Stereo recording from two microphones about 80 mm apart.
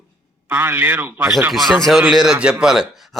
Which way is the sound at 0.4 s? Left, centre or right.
Right.